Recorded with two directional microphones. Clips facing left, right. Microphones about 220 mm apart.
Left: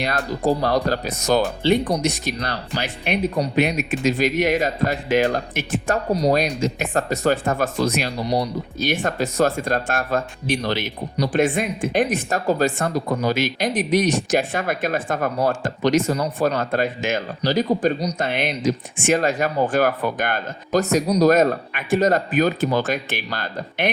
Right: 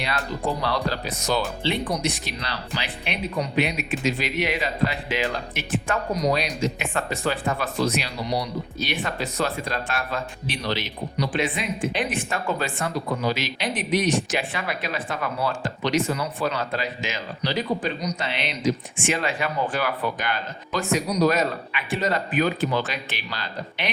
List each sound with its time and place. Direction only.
0.0 s speech: 45° left (ahead or behind)